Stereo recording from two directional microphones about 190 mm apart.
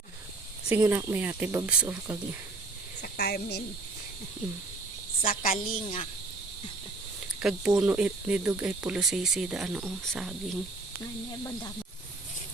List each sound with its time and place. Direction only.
0.7 s speech: 15° right (ahead or behind)
3.0 s speech: 60° left (ahead or behind)
5.2 s a woman's voice: 45° left (ahead or behind)
7.4 s speech: 5° right (ahead or behind)